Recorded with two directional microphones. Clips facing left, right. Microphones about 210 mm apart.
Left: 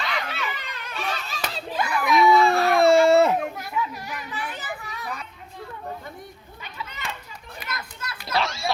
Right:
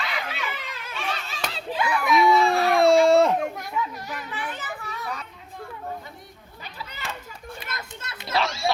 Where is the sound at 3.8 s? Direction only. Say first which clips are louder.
Left 1 dB; 5° left (ahead or behind).